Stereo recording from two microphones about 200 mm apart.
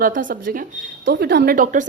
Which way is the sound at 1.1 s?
55° right (ahead or behind).